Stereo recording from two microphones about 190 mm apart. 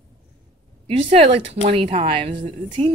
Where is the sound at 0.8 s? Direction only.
30° right (ahead or behind).